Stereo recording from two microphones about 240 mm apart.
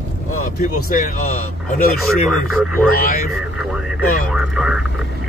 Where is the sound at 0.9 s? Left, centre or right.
Left.